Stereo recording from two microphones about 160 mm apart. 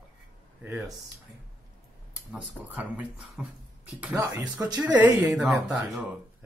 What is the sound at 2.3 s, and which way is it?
Speech, 5° right (ahead or behind).